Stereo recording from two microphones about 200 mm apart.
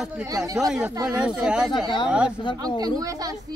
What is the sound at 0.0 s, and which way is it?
Speech, 5° right (ahead or behind).